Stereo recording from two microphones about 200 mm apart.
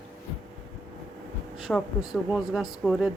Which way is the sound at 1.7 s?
Centre (ahead or behind).